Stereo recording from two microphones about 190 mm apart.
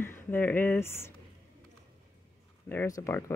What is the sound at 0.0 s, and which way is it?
Speech, 10° left (ahead or behind).